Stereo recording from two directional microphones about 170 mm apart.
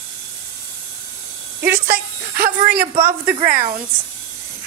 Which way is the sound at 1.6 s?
60° right (ahead or behind).